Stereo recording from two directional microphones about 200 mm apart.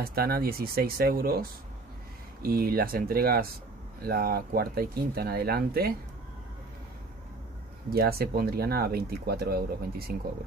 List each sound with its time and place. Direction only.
0.0 s speech: 50° right (ahead or behind)
7.9 s speech: 50° right (ahead or behind)